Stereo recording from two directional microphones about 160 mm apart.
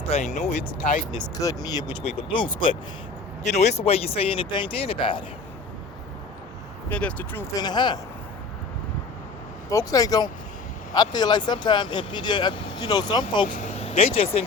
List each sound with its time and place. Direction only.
0.1 s speech: 45° left (ahead or behind)
1.4 s speech: 20° left (ahead or behind)
3.4 s speech: 45° left (ahead or behind)
6.9 s speech: 10° left (ahead or behind)
7.5 s speech: 25° left (ahead or behind)
9.6 s speech: 20° left (ahead or behind)
13.5 s speech: 50° left (ahead or behind)